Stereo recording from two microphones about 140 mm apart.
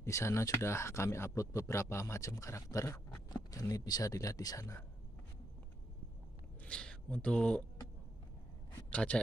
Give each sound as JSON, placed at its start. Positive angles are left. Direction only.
{"t": 0.0, "sound": "speech", "side_deg": 20}
{"t": 6.6, "sound": "speech", "side_deg": 5}
{"t": 8.9, "sound": "speech", "side_deg": 10}